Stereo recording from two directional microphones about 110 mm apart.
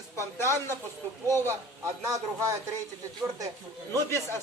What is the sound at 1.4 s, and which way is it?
Speech, 25° right (ahead or behind).